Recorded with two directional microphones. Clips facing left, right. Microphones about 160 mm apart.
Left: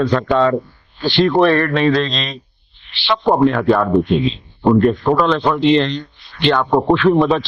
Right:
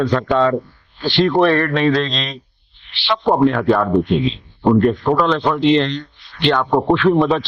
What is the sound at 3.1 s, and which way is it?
Speech, 30° left (ahead or behind).